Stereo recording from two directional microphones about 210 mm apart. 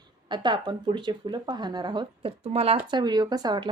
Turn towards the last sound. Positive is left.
turn(degrees=-20)  # may be behind; listen again after turning